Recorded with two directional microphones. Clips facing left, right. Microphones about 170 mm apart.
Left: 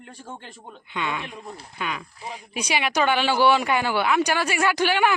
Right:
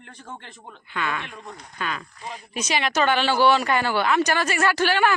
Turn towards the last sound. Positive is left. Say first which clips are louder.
# even
turn(degrees=15)  # may be behind; listen again after turning